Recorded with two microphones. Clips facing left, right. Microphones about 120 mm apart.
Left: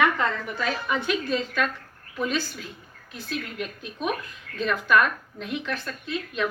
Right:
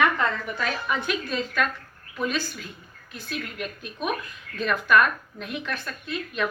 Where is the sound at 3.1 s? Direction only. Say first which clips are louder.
Left 1 dB; 25° left (ahead or behind).